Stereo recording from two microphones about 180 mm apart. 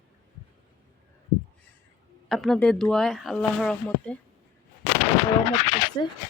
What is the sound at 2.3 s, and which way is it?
Speech, centre (ahead or behind).